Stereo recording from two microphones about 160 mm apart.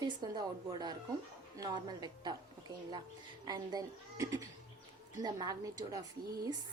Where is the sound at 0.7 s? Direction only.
25° right (ahead or behind).